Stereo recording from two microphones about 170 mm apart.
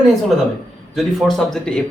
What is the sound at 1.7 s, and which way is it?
Speech, 5° left (ahead or behind).